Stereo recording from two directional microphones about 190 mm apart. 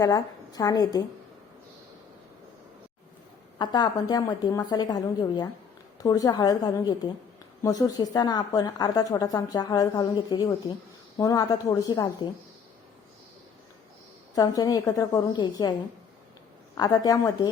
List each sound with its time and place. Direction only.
0.0 s a woman's voice: 20° left (ahead or behind)
3.6 s a woman's voice: 20° left (ahead or behind)
14.3 s a woman's voice: 20° left (ahead or behind)
16.7 s a woman's voice: 20° left (ahead or behind)